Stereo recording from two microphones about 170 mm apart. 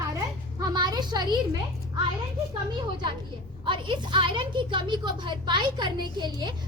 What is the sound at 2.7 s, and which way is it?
A woman's voice, 25° right (ahead or behind).